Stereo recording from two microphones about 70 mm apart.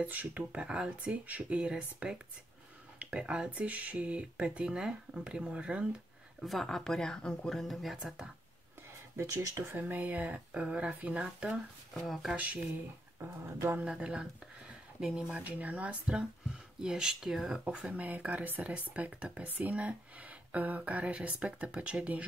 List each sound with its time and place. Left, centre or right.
0.0 s speech: right
6.4 s speech: centre
9.1 s speech: right
9.8 s speech: right
11.2 s speech: centre
13.7 s speech: centre
14.7 s a sound: centre
15.3 s speech: right
18.0 s speech: right